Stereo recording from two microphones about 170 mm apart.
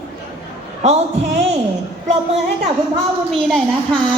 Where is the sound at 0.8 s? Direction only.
40° right (ahead or behind).